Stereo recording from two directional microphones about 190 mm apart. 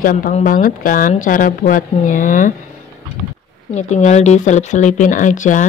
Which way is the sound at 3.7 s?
40° left (ahead or behind).